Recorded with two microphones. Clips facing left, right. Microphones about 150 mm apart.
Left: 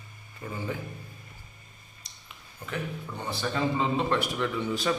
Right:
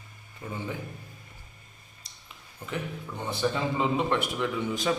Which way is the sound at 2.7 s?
20° right (ahead or behind).